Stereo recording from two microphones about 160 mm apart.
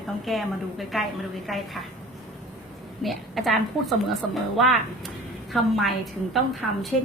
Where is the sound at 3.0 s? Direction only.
Centre (ahead or behind).